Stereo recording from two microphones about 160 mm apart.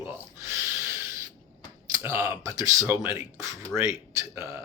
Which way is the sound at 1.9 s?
20° right (ahead or behind).